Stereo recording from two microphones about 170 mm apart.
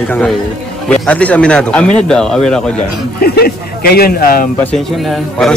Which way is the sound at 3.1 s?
65° left (ahead or behind).